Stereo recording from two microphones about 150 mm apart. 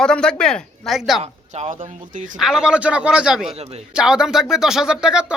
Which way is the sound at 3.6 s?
45° right (ahead or behind).